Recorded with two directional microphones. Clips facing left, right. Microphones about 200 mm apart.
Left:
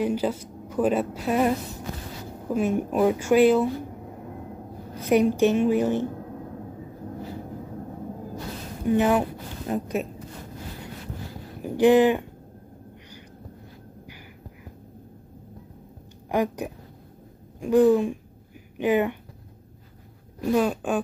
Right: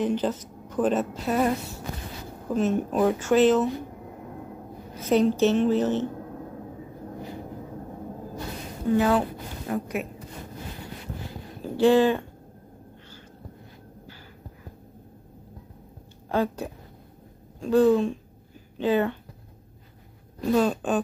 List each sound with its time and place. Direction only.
0.0 s speech: 10° left (ahead or behind)
4.9 s speech: 15° left (ahead or behind)
8.8 s a woman's voice: 20° left (ahead or behind)
11.6 s speech: 15° left (ahead or behind)
16.3 s speech: 15° left (ahead or behind)
20.3 s speech: 10° left (ahead or behind)